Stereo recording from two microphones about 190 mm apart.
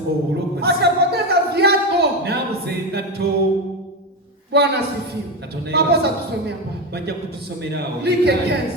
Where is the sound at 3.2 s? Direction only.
55° right (ahead or behind).